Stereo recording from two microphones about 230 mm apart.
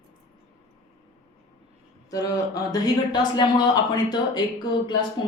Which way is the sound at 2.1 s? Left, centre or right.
Centre.